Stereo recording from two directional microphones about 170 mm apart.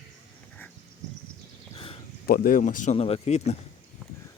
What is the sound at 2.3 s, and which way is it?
Speech, 55° left (ahead or behind).